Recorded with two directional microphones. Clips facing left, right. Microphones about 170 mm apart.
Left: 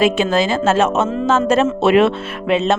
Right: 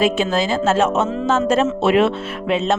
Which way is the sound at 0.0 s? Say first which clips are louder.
Left 3 dB; 75° left (ahead or behind).